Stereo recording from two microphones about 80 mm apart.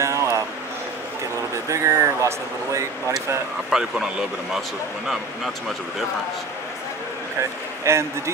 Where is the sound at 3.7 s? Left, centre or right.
Centre.